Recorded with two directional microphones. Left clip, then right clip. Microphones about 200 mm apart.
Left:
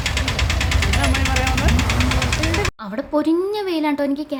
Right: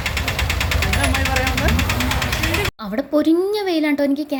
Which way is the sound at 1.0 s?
50° right (ahead or behind).